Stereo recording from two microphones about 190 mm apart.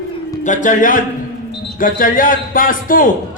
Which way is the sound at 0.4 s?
40° left (ahead or behind).